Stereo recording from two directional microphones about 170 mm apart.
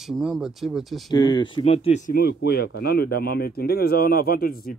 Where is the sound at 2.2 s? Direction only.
70° left (ahead or behind).